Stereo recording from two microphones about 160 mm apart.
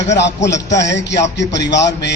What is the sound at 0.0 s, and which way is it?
A man's voice, 90° left.